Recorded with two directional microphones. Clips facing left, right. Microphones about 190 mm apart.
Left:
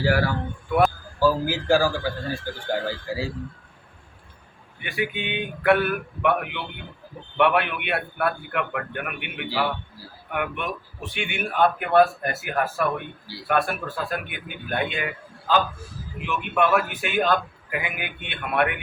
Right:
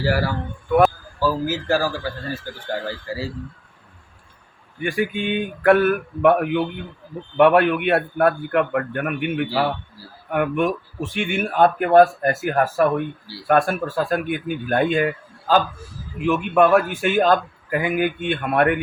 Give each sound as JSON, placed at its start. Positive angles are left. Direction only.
{"t": 0.0, "sound": "a man's voice", "side_deg": -5}
{"t": 4.8, "sound": "a man's voice", "side_deg": -45}